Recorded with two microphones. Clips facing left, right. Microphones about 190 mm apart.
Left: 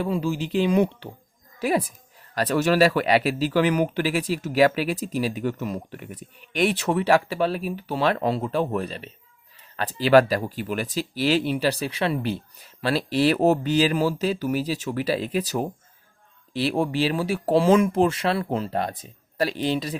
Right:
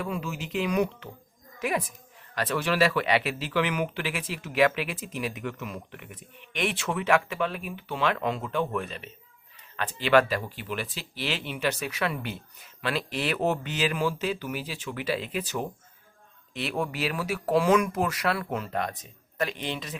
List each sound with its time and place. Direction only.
0.0 s a woman's voice: 30° left (ahead or behind)